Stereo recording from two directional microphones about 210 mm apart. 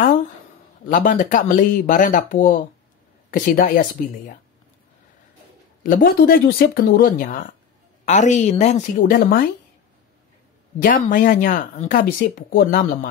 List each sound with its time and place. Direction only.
0.8 s speech: 35° left (ahead or behind)
5.9 s speech: 45° left (ahead or behind)
8.9 s speech: 45° left (ahead or behind)
10.8 s speech: 40° left (ahead or behind)